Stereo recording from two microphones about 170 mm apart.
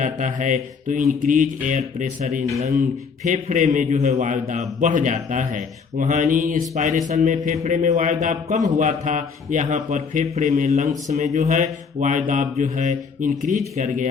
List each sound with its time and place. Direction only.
0.0 s a man's voice: 50° right (ahead or behind)